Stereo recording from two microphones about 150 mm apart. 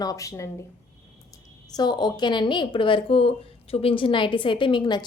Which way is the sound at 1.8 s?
30° left (ahead or behind).